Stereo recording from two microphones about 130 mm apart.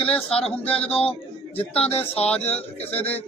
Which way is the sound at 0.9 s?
50° left (ahead or behind).